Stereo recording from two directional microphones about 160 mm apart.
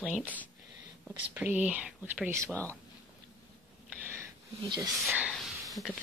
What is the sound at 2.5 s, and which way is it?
Speech, 10° left (ahead or behind).